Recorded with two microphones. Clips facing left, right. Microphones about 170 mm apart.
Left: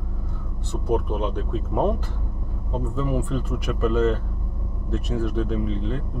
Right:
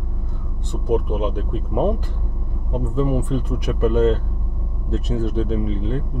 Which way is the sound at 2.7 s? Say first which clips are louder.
Right 4 dB; 20° right (ahead or behind).